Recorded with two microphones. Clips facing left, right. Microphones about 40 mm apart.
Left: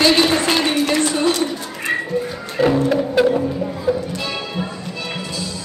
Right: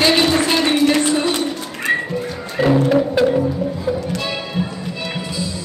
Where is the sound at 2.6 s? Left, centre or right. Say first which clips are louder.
Even; centre.